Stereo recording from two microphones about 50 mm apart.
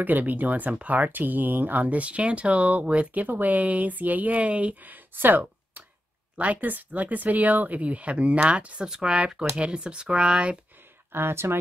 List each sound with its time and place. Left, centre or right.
0.0 s speech: right
11.1 s speech: right